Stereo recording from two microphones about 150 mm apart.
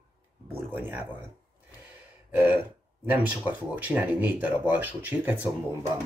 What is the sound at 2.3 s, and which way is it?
Speech, 15° right (ahead or behind).